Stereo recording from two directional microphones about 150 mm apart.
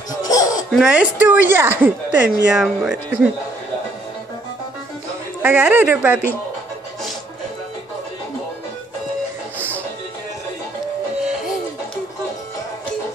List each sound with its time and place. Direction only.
0.2 s baby laughter: 25° left (ahead or behind)
0.8 s a woman's voice: 10° right (ahead or behind)
5.4 s a woman's voice: 10° right (ahead or behind)